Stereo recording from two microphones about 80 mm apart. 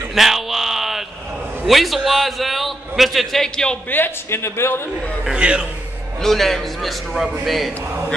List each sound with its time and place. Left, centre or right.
0.1 s a sound: centre
1.7 s a man's voice: centre
3.9 s a man's voice: left
5.2 s a man's voice: centre
6.2 s a man's voice: centre